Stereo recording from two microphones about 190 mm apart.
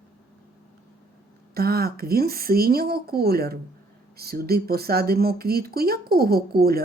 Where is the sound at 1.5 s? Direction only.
55° right (ahead or behind).